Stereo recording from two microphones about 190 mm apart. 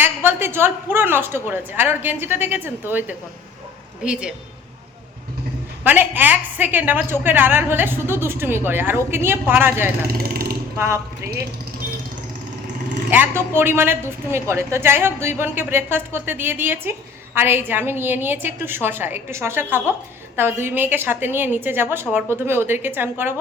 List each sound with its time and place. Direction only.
0.0 s a woman's voice: 10° right (ahead or behind)
5.8 s a woman's voice: 10° right (ahead or behind)
10.1 s speech: 50° right (ahead or behind)
10.8 s a woman's voice: 15° right (ahead or behind)
13.1 s a woman's voice: 10° right (ahead or behind)